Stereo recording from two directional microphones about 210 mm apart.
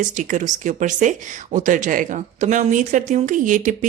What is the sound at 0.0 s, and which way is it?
Speech, 40° right (ahead or behind).